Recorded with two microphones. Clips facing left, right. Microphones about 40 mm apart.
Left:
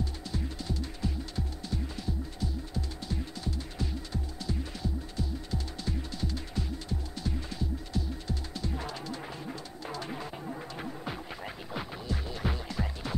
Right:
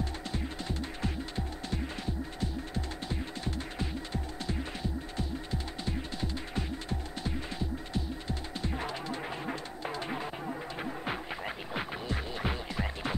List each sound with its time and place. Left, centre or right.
0.0 s music: right